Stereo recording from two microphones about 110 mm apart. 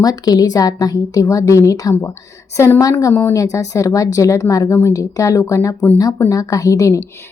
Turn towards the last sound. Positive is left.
turn(degrees=30)  # may be behind; listen again after turning